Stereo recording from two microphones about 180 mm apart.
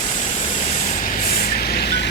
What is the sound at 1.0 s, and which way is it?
Vehicle, 55° left (ahead or behind).